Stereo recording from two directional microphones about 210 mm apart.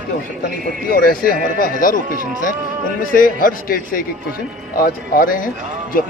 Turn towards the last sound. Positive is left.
turn(degrees=40)  # may be behind; listen again after turning